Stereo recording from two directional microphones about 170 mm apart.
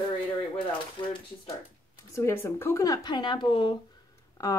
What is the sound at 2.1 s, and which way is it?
Speech, 15° left (ahead or behind).